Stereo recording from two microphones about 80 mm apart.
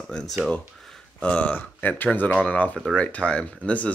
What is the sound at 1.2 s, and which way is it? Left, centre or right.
Speech, centre.